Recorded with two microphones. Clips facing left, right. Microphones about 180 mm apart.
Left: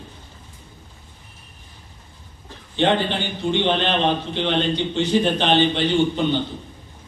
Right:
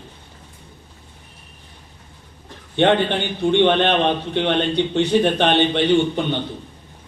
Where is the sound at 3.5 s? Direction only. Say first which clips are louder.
Right 5 dB; 60° right (ahead or behind).